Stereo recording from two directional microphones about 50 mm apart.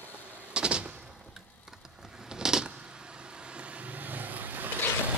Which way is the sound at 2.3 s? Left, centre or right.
Centre.